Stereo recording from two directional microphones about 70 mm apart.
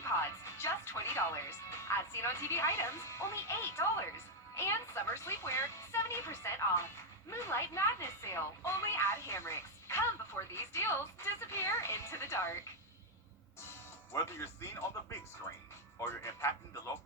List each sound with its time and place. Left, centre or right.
0.0 s speech: left
13.6 s music: left
15.5 s speech: left
16.0 s speech: left